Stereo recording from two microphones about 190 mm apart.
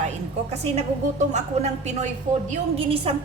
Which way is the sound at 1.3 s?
35° right (ahead or behind).